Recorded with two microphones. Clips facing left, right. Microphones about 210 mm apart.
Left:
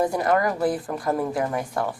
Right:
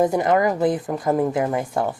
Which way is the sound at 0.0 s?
20° right (ahead or behind).